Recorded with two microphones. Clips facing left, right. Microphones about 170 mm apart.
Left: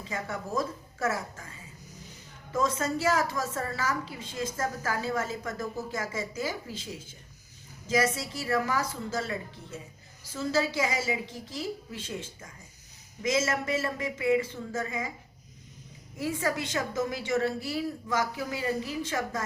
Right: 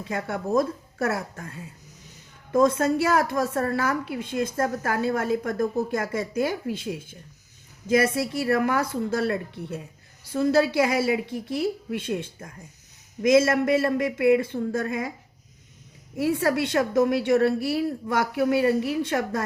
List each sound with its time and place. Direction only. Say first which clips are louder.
0.0 s a woman's voice: right 6 dB; 60° right (ahead or behind)
16.1 s a woman's voice: right 7 dB; 65° right (ahead or behind)